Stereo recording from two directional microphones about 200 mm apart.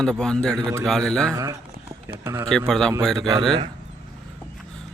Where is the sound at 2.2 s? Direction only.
10° right (ahead or behind).